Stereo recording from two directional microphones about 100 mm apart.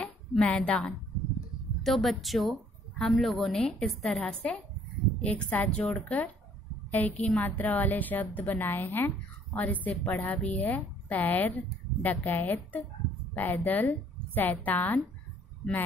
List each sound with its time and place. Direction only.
0.0 s a woman's voice: 10° left (ahead or behind)